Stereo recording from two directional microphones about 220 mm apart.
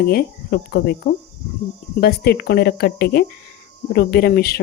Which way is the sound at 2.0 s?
45° left (ahead or behind).